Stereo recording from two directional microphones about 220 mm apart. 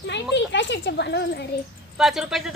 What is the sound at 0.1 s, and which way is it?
Speech, 55° left (ahead or behind).